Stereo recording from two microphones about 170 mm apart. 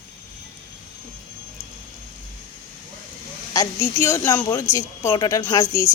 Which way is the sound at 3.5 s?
20° left (ahead or behind).